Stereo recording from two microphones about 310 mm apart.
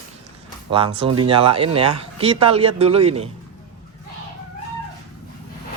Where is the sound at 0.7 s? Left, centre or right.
Centre.